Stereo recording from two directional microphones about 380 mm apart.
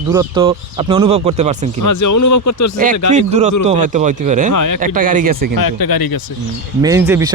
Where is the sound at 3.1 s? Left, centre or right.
Centre.